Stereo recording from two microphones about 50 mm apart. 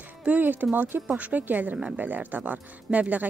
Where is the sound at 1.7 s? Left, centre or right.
Centre.